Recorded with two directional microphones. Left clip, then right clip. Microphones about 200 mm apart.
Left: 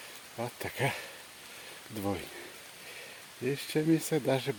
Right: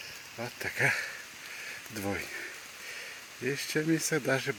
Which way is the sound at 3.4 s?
10° left (ahead or behind).